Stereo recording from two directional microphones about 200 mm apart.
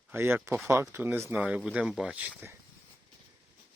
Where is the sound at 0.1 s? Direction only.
10° right (ahead or behind).